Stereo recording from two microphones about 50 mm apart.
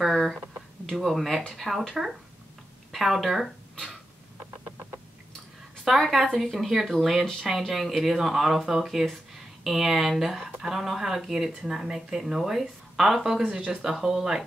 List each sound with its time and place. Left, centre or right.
0.0 s a sound: centre
0.8 s speech: centre
5.9 s speech: centre
13.6 s speech: centre